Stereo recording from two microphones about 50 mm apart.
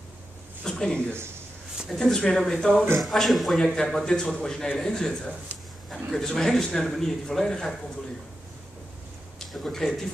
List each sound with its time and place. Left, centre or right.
0.7 s a man's voice: centre
9.5 s speech: centre